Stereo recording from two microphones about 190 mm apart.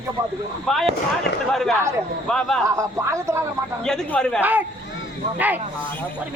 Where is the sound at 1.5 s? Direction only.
Centre (ahead or behind).